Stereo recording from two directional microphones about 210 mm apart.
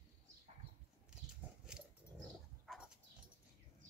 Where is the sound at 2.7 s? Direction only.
5° right (ahead or behind).